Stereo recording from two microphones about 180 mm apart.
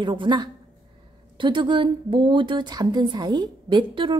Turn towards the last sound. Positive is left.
turn(degrees=-25)  # may be behind; listen again after turning